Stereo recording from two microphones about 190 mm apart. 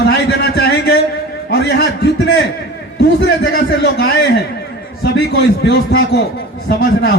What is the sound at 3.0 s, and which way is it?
A man's voice, 60° left (ahead or behind).